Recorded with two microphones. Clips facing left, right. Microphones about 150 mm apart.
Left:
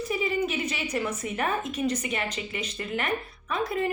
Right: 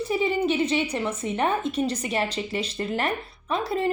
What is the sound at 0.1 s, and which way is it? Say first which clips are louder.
A woman's voice: right 4 dB; 30° right (ahead or behind).